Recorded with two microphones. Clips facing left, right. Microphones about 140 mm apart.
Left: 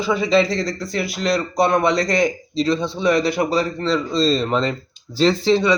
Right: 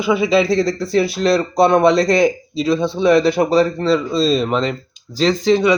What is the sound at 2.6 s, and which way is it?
Speech, 10° right (ahead or behind).